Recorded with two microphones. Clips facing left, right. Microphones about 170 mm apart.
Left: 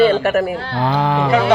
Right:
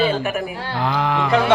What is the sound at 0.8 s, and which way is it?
Speech, 35° left (ahead or behind).